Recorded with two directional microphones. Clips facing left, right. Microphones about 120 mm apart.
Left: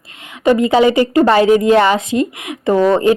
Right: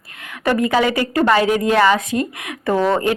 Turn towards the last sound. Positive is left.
turn(degrees=20)  # may be behind; listen again after turning